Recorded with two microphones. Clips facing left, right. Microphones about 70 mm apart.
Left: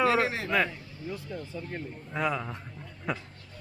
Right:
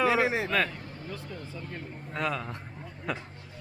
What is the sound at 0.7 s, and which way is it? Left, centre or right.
Vehicle, right.